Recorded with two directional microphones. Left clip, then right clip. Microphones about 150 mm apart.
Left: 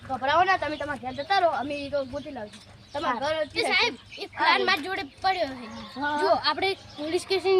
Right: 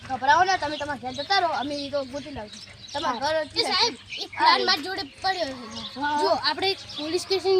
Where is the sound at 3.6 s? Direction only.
10° left (ahead or behind).